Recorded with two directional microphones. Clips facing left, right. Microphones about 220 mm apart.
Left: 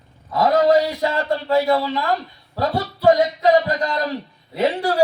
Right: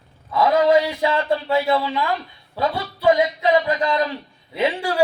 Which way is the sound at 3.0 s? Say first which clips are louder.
Left 2 dB; 40° left (ahead or behind).